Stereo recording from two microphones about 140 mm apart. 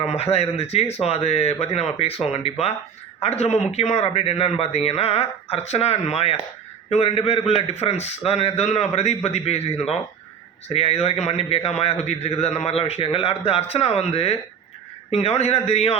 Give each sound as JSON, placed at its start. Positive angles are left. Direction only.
{"t": 0.0, "sound": "a man's voice", "side_deg": 50}